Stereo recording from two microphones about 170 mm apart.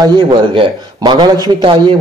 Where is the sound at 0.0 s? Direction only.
25° right (ahead or behind).